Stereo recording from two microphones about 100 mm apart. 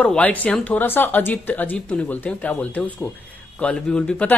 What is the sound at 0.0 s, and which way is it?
Speech, 15° left (ahead or behind).